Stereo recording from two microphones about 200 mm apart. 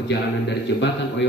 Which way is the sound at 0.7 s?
60° left (ahead or behind).